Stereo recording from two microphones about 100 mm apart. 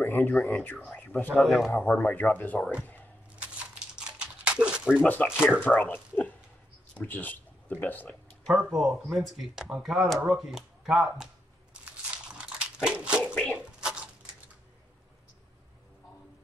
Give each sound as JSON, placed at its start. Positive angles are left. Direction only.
{"t": 0.0, "sound": "speech", "side_deg": 20}
{"t": 1.3, "sound": "speech", "side_deg": 0}
{"t": 1.8, "sound": "speech", "side_deg": 10}
{"t": 3.9, "sound": "a sound", "side_deg": -10}
{"t": 5.0, "sound": "speech", "side_deg": 15}
{"t": 8.5, "sound": "speech", "side_deg": 0}
{"t": 11.7, "sound": "dog", "side_deg": -10}
{"t": 13.6, "sound": "a sound", "side_deg": -10}